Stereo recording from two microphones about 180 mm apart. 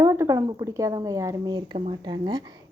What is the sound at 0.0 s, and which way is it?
A woman's voice, 15° right (ahead or behind).